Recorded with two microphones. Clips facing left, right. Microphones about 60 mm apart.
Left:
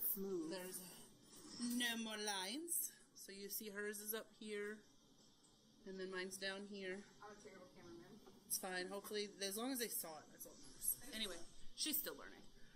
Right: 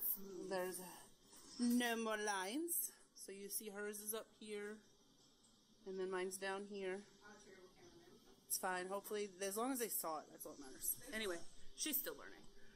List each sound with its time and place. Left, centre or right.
0.0 s a sound: left
0.5 s a woman's voice: right; by 4.7 s centre
5.9 s speech: centre
8.5 s a woman's voice: centre